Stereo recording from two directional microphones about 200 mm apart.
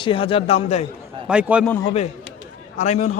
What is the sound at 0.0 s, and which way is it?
Speech, 25° left (ahead or behind).